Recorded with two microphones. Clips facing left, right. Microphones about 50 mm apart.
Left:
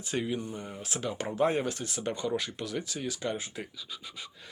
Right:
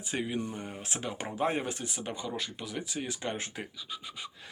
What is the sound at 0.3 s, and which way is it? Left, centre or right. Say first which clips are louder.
Speech: right 2 dB; right.